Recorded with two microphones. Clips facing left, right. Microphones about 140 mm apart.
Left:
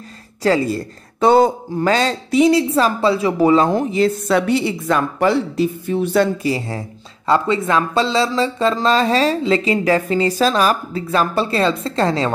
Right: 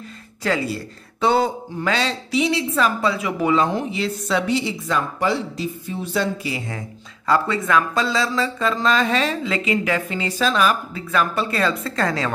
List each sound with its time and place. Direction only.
0.4 s speech: 40° left (ahead or behind); by 6.2 s 60° left (ahead or behind)
6.4 s speech: 35° left (ahead or behind)
7.2 s speech: 25° left (ahead or behind)